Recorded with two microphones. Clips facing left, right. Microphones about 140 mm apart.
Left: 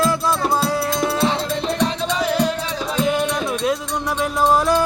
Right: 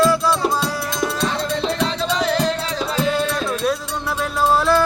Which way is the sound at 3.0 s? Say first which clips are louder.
Left 2 dB; 15° left (ahead or behind).